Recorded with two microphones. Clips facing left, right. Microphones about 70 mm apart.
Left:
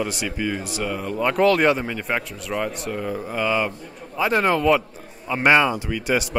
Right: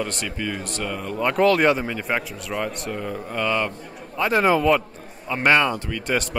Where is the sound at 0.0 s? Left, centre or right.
Centre.